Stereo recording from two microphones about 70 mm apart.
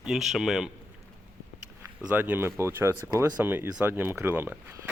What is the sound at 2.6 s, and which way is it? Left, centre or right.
Speech, right.